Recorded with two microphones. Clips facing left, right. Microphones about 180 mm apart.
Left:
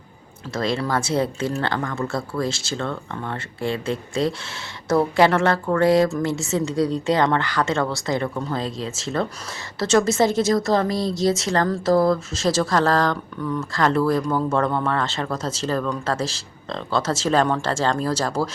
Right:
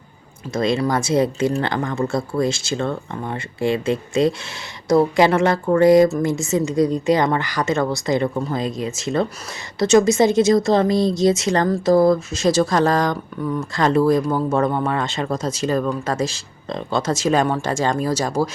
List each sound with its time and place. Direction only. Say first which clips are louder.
0.5 s speech: right 4 dB; 15° right (ahead or behind)